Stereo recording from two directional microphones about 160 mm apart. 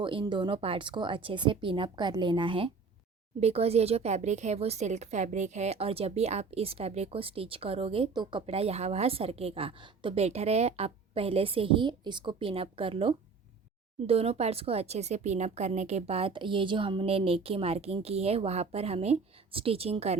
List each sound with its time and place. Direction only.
0.0 s a woman's voice: 30° right (ahead or behind)